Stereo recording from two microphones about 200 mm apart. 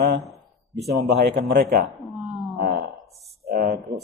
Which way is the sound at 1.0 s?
55° right (ahead or behind).